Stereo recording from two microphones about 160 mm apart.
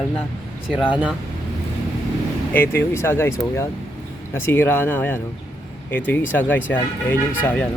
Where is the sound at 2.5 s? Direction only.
15° left (ahead or behind).